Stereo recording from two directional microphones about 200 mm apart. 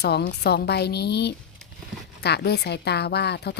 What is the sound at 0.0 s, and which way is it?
A woman's voice, 55° left (ahead or behind).